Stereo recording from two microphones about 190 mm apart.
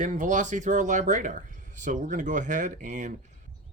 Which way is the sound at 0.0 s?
40° right (ahead or behind).